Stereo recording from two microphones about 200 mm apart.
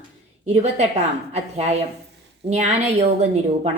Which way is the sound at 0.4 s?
30° right (ahead or behind).